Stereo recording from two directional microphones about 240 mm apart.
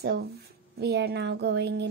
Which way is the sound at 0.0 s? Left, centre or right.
Right.